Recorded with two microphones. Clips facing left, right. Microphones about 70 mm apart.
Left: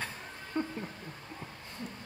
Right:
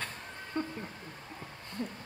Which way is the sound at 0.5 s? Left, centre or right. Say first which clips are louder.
Left 1 dB; centre.